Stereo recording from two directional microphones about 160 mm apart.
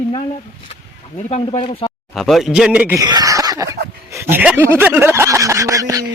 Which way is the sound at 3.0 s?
25° right (ahead or behind).